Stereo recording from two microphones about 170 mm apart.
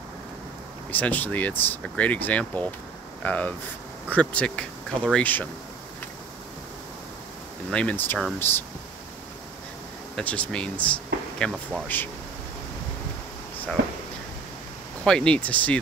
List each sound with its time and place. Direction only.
0.9 s speech: 10° left (ahead or behind)
7.7 s speech: 10° left (ahead or behind)
10.1 s speech: 5° left (ahead or behind)
13.8 s a sound: 90° right
15.0 s speech: 5° left (ahead or behind)